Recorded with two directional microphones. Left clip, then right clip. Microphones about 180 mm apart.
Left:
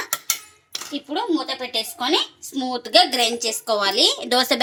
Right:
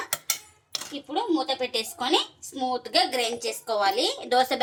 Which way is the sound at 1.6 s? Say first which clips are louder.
Left 3 dB; 30° left (ahead or behind).